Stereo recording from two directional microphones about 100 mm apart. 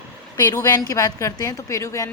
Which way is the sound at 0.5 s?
35° left (ahead or behind).